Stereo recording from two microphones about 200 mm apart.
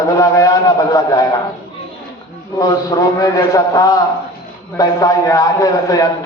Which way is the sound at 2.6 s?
15° left (ahead or behind).